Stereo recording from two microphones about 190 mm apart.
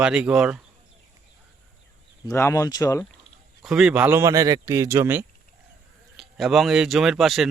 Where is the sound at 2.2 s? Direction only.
15° left (ahead or behind).